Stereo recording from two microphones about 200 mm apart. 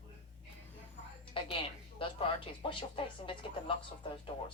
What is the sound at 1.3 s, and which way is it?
Speech, 25° left (ahead or behind).